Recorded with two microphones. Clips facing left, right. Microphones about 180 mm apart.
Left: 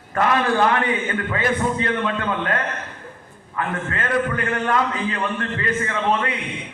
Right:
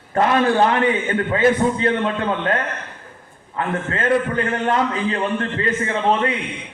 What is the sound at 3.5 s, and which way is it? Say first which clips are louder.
A man's voice: right 3 dB; 25° right (ahead or behind).